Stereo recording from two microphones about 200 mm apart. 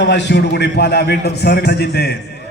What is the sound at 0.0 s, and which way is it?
A man's voice, 60° left (ahead or behind).